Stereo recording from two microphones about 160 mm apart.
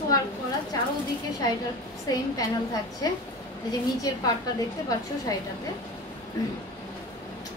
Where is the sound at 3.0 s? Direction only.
25° left (ahead or behind).